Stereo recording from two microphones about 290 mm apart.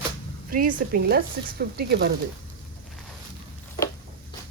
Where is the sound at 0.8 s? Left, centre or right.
Right.